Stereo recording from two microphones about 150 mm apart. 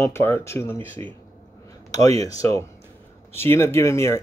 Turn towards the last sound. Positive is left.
turn(degrees=20)  # may be behind; listen again after turning